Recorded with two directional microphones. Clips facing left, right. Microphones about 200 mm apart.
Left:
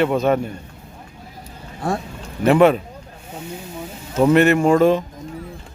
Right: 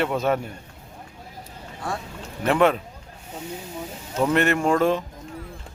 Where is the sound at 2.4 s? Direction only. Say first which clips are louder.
Left 6 dB; 5° left (ahead or behind).